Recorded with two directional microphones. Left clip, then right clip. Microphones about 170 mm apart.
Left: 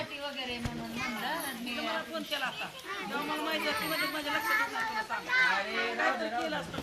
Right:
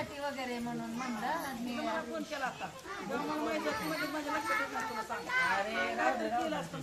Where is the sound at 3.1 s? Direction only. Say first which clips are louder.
Left 1 dB; 75° right (ahead or behind).